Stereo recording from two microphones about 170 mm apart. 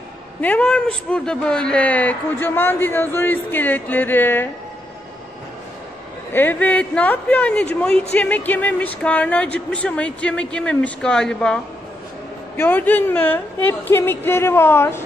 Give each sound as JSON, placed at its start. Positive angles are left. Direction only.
{"t": 0.4, "sound": "speech", "side_deg": 10}
{"t": 6.3, "sound": "speech", "side_deg": 10}